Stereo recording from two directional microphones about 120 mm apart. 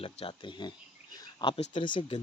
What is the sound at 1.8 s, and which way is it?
Speech, 40° left (ahead or behind).